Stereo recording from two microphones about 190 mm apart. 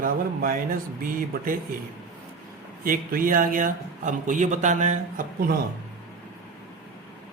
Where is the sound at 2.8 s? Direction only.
50° right (ahead or behind).